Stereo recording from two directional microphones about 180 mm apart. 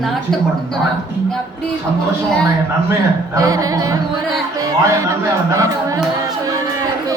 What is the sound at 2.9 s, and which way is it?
Speech, 20° right (ahead or behind).